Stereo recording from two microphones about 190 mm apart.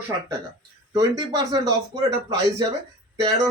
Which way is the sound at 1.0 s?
20° right (ahead or behind).